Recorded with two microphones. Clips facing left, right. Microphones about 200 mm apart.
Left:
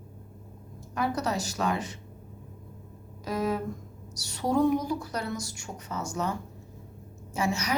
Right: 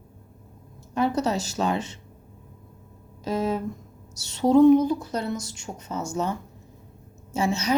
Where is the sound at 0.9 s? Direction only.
25° right (ahead or behind).